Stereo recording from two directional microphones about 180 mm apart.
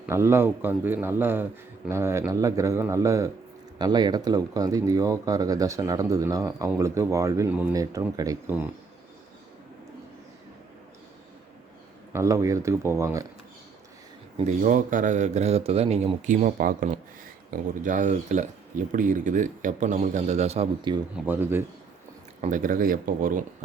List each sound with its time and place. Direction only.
0.0 s a man's voice: 15° right (ahead or behind)
12.1 s a man's voice: 15° right (ahead or behind)
14.4 s speech: 45° right (ahead or behind); by 21.0 s 30° right (ahead or behind)
21.2 s a man's voice: 10° right (ahead or behind)
22.4 s speech: 45° right (ahead or behind)